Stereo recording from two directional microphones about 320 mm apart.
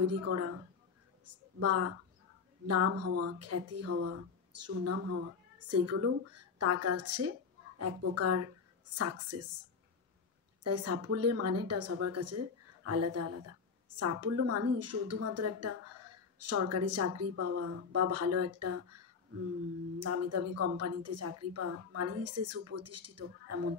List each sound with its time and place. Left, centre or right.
0.0 s a woman's voice: right
10.6 s a woman's voice: right